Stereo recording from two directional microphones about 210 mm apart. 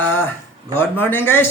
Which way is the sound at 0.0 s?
10° left (ahead or behind).